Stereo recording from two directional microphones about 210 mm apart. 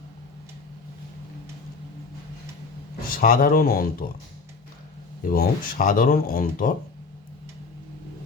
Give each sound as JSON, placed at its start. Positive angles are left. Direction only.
{"t": 3.1, "sound": "speech", "side_deg": 45}
{"t": 5.2, "sound": "speech", "side_deg": 40}